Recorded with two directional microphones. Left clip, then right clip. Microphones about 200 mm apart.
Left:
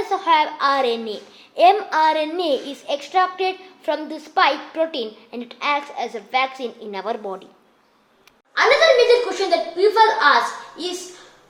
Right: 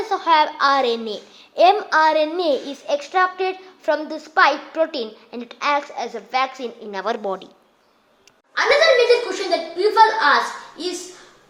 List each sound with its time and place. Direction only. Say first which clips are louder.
0.1 s a child's voice: right 1 dB; 20° right (ahead or behind)
8.5 s a woman's voice: left 1 dB; centre (ahead or behind)